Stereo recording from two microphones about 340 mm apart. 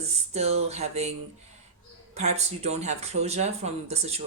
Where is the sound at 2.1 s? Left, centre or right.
Centre.